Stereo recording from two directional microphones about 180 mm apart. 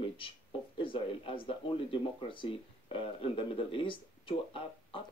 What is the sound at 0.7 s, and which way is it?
Speech, 30° left (ahead or behind).